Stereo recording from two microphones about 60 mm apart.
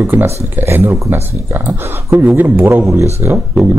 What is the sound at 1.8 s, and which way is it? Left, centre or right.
Speech, right.